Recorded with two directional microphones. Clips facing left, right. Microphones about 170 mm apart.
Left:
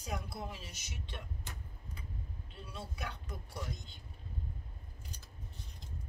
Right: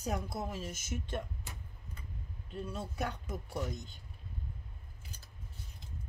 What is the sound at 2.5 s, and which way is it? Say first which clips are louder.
Speech: right 9 dB; 45° right (ahead or behind).